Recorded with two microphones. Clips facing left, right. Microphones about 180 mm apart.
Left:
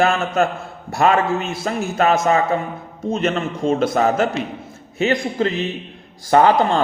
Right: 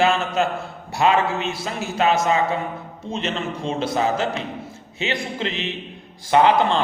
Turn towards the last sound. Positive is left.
turn(degrees=45)  # may be behind; listen again after turning